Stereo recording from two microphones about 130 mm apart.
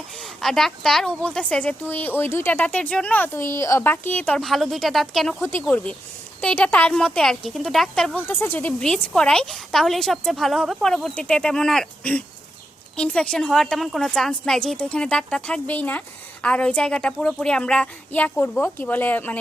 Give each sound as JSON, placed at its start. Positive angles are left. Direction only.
{"t": 0.2, "sound": "a woman's voice", "side_deg": 0}
{"t": 5.4, "sound": "a woman's voice", "side_deg": 15}
{"t": 8.3, "sound": "a woman's voice", "side_deg": 15}